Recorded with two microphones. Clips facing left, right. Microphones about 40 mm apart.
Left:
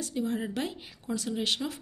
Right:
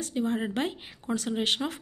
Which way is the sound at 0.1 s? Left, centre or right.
Right.